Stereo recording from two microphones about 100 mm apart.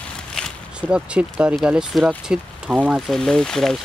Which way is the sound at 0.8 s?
10° right (ahead or behind).